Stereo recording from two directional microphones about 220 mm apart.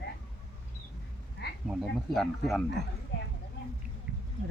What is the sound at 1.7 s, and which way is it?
Speech, centre (ahead or behind).